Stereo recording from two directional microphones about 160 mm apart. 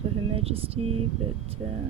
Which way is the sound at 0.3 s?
40° right (ahead or behind).